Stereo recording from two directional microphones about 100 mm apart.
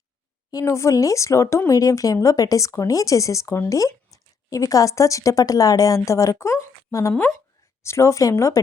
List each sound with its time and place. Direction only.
0.5 s speech: 30° left (ahead or behind)
7.1 s speech: 15° left (ahead or behind)
7.8 s speech: 30° left (ahead or behind)